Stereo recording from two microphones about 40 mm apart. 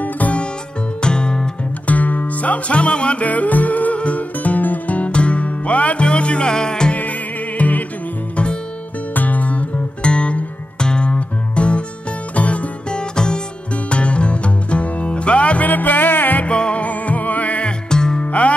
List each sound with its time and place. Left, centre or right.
0.0 s music: left
1.0 s music: left
1.9 s music: left
3.3 s music: left; by 6.9 s centre
6.9 s music: left
9.1 s music: left
12.9 s music: left
16.4 s music: left
16.8 s music: left
17.6 s music: centre
18.2 s music: left